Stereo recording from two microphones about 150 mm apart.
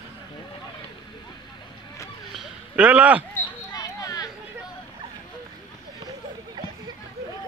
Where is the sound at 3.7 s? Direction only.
25° left (ahead or behind).